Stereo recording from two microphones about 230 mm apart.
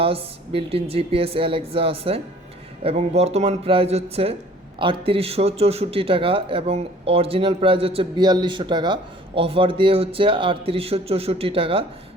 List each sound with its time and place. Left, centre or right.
0.0 s a man's voice: right